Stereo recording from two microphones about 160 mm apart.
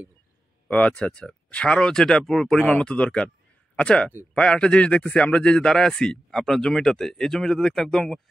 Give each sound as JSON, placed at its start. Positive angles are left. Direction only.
{"t": 0.7, "sound": "a man's voice", "side_deg": 5}